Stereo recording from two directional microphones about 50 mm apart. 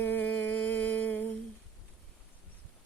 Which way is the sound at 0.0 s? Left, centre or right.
Left.